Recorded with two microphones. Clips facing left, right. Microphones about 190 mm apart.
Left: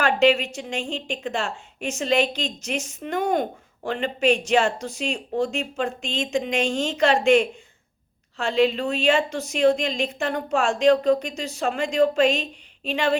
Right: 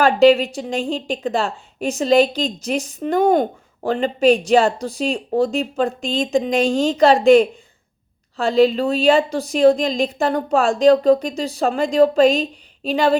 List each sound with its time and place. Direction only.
0.0 s a woman's voice: 35° right (ahead or behind)